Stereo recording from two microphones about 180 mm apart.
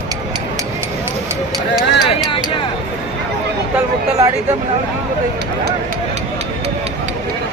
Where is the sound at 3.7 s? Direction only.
15° right (ahead or behind).